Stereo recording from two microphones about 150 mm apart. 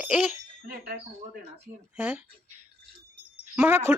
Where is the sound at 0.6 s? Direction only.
75° right (ahead or behind).